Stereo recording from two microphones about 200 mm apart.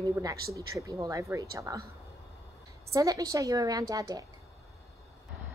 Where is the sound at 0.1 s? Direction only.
15° right (ahead or behind).